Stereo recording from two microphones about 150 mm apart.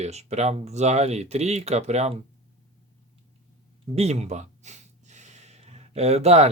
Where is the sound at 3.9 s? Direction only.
45° right (ahead or behind).